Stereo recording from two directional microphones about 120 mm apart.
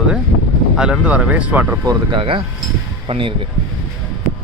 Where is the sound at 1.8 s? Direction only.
30° right (ahead or behind).